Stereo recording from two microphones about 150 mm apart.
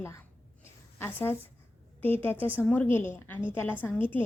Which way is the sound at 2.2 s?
15° left (ahead or behind).